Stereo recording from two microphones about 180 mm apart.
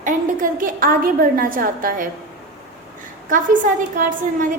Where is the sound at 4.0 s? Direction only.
50° right (ahead or behind).